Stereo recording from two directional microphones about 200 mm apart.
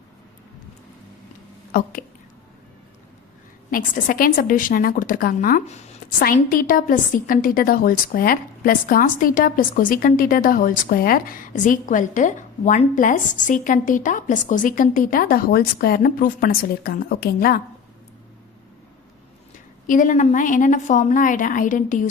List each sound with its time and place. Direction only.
1.7 s a woman's voice: 45° left (ahead or behind)
3.7 s a woman's voice: 45° left (ahead or behind)
19.9 s a woman's voice: 40° left (ahead or behind)